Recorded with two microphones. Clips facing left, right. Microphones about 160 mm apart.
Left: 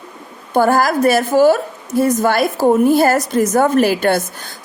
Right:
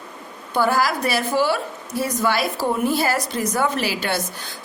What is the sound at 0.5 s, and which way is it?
A woman's voice, 50° left (ahead or behind).